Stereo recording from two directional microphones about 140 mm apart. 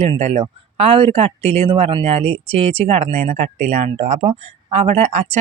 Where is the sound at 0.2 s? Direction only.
50° right (ahead or behind).